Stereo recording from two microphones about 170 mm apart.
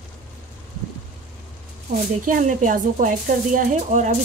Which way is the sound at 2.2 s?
50° right (ahead or behind).